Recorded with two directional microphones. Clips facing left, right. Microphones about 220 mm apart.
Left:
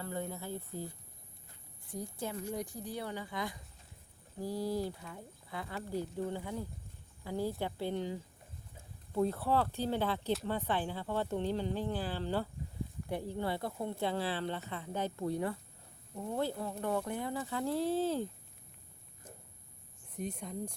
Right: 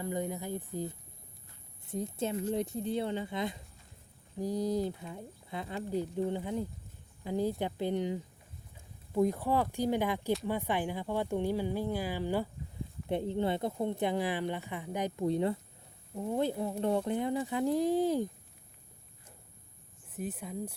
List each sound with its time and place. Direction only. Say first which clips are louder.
0.0 s speech: right 5 dB; 15° right (ahead or behind)
20.1 s speech: right 2 dB; 5° right (ahead or behind)